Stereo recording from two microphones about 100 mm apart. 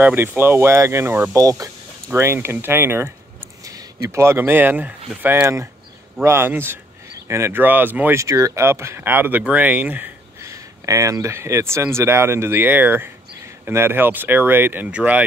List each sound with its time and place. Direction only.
0.0 s speech: 20° right (ahead or behind); by 1.7 s 35° right (ahead or behind)
2.1 s speech: 25° right (ahead or behind)
8.2 s speech: 30° right (ahead or behind)
10.4 s speech: 30° right (ahead or behind); by 15.2 s 15° right (ahead or behind)